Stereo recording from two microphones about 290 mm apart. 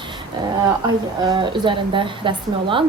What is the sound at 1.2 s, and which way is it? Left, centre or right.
A woman's voice, centre.